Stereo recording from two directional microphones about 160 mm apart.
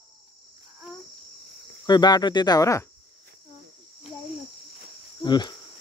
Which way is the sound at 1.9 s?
25° left (ahead or behind).